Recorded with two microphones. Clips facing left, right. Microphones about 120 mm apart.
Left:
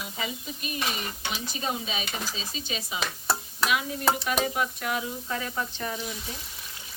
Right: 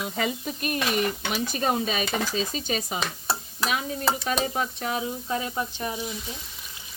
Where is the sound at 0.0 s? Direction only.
55° right (ahead or behind).